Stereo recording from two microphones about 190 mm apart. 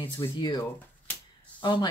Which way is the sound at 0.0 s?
25° left (ahead or behind).